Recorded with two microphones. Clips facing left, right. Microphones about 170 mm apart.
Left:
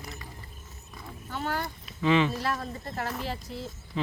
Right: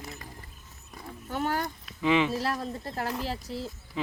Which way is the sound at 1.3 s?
45° right (ahead or behind).